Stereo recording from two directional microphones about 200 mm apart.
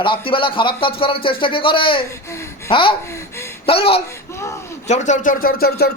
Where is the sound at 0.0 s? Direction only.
25° left (ahead or behind).